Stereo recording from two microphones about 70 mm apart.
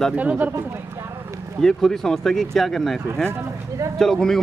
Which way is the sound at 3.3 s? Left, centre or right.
Right.